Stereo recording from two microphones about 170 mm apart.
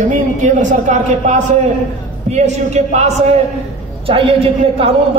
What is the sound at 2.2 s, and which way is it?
A man's voice, 40° right (ahead or behind).